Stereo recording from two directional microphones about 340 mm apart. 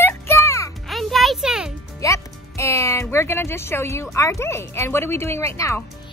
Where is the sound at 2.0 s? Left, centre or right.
Centre.